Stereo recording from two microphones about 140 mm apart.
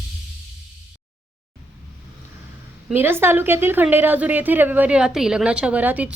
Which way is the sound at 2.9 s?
15° right (ahead or behind).